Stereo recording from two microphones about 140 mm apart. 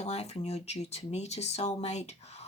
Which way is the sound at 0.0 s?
50° left (ahead or behind).